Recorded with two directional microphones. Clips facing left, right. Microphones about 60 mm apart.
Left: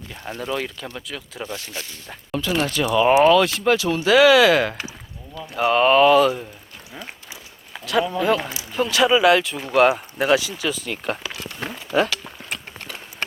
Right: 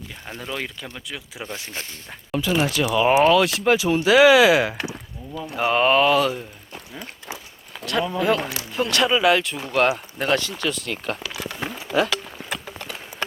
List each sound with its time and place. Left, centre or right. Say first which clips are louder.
0.3 s speech: left 4 dB; centre
1.6 s speech: even; right
2.0 s speech: right 1 dB; centre
3.8 s speech: right 1 dB; centre
7.7 s speech: left 3 dB; centre